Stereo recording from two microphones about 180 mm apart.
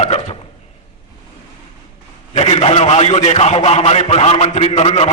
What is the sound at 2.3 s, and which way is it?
A man's voice, 40° left (ahead or behind).